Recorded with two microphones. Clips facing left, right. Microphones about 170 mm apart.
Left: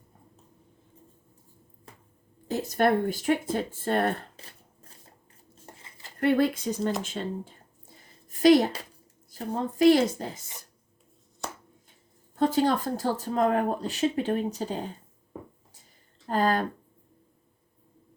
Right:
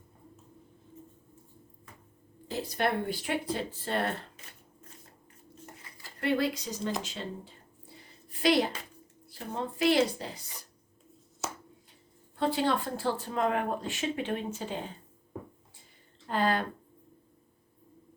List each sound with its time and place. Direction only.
2.5 s speech: 45° left (ahead or behind)
4.4 s shuffling cards: 35° left (ahead or behind)
5.7 s dishes: 25° left (ahead or behind)
6.1 s speech: 50° left (ahead or behind)
7.0 s a sound: 50° left (ahead or behind)
9.3 s speech: 40° left (ahead or behind)
11.4 s a sound: 5° right (ahead or behind)
12.4 s speech: 45° left (ahead or behind)
16.2 s speech: 40° left (ahead or behind)